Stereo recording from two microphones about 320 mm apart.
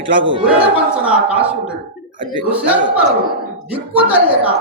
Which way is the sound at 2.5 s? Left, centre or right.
Centre.